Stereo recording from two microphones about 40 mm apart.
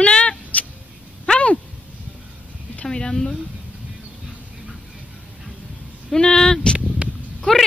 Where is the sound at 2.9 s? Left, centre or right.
Centre.